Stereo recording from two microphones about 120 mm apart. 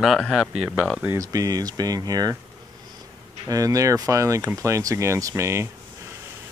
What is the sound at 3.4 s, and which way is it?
Speech, 30° right (ahead or behind).